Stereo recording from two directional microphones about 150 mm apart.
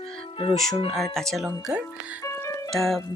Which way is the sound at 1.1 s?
Centre (ahead or behind).